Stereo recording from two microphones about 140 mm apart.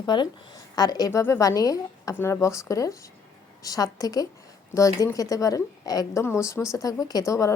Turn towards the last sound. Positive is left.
turn(degrees=25)  # may be behind; listen again after turning